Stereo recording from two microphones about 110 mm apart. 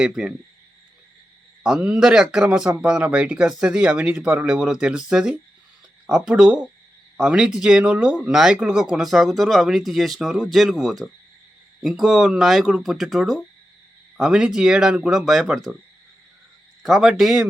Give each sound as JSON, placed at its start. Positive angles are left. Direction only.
{"t": 0.0, "sound": "speech", "side_deg": -5}
{"t": 1.6, "sound": "speech", "side_deg": -10}
{"t": 16.8, "sound": "speech", "side_deg": -5}